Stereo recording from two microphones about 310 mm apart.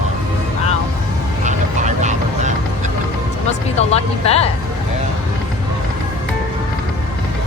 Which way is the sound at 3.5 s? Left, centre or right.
Centre.